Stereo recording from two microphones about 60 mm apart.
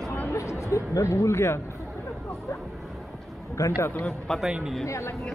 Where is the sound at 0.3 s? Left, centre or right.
Left.